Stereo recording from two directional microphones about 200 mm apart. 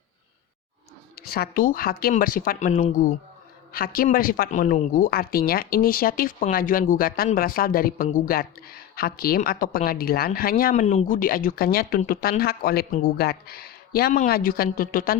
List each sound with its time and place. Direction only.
1.1 s speech: 50° left (ahead or behind)